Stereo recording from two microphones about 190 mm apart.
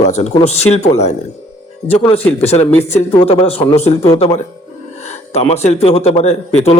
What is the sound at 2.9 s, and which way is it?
Speech, 35° left (ahead or behind).